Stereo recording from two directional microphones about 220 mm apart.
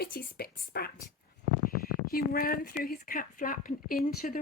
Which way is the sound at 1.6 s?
45° left (ahead or behind).